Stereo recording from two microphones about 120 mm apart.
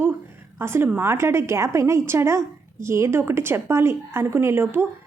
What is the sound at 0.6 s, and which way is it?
Speech, 20° right (ahead or behind).